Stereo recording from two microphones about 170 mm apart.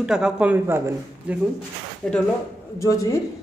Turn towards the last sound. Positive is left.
turn(degrees=20)  # may be behind; listen again after turning